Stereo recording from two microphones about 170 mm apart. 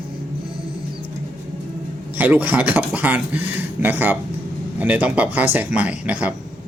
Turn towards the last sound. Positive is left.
turn(degrees=-5)  # may be behind; listen again after turning